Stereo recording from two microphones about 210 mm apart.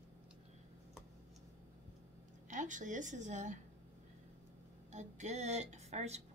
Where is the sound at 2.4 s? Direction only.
35° right (ahead or behind).